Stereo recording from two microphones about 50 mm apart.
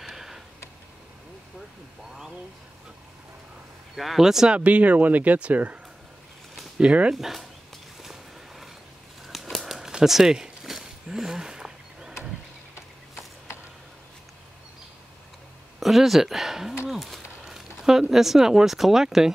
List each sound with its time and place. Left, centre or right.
0.0 s tick: centre
3.9 s speech: centre
4.6 s speech: right
6.8 s speech: right
7.2 s a sound: centre
15.8 s speech: centre
17.5 s a sound: centre
18.1 s speech: centre